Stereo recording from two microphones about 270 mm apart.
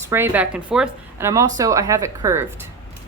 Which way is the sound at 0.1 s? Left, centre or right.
Centre.